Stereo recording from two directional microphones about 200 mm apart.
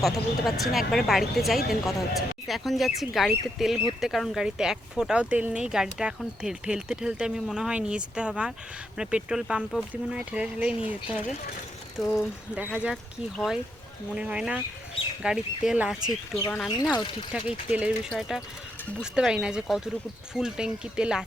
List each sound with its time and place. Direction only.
0.0 s speech: centre (ahead or behind)
11.9 s speech: centre (ahead or behind)